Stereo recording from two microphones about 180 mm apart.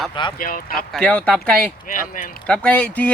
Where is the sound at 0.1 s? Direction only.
25° left (ahead or behind).